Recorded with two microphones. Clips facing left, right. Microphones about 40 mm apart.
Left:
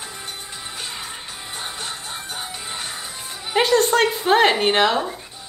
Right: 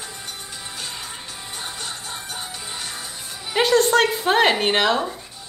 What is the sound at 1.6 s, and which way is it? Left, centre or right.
Music, centre.